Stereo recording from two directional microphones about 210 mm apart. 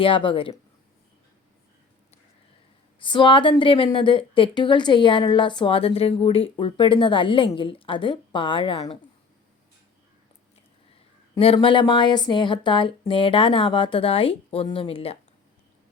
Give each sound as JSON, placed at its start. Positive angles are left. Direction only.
{"t": 0.0, "sound": "speech", "side_deg": 25}
{"t": 3.0, "sound": "speech", "side_deg": 25}
{"t": 11.3, "sound": "speech", "side_deg": 25}